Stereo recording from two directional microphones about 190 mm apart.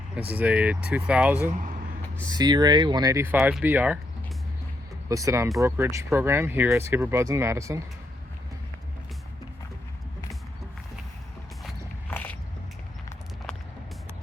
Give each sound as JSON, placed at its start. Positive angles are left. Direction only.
{"t": 0.2, "sound": "speech", "side_deg": -10}
{"t": 1.5, "sound": "speech", "side_deg": -40}
{"t": 2.3, "sound": "speech", "side_deg": -20}
{"t": 5.0, "sound": "speech", "side_deg": -15}
{"t": 12.1, "sound": "biting", "side_deg": 10}